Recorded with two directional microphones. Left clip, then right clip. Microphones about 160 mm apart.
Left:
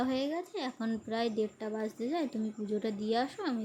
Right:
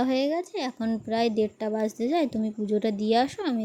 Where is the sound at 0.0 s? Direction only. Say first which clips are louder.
Right 8 dB; 40° right (ahead or behind).